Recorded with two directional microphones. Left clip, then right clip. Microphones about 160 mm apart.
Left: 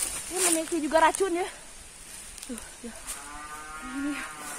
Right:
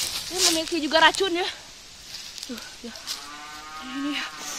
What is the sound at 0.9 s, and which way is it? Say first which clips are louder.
Speech: right 4 dB; 20° right (ahead or behind).